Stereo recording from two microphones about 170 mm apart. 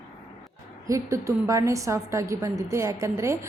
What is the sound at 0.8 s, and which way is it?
Speech, 20° right (ahead or behind).